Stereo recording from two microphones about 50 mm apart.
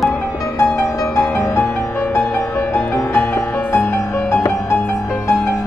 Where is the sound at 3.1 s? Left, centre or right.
Left.